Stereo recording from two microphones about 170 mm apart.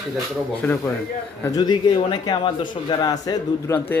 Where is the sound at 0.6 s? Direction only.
10° left (ahead or behind).